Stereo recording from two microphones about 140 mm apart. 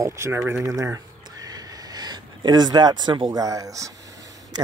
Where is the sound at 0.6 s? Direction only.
20° right (ahead or behind).